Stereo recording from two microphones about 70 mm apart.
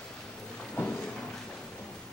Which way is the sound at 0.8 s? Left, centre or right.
Left.